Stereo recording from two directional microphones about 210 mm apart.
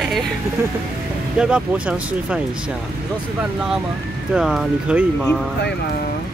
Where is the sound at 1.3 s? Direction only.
5° right (ahead or behind).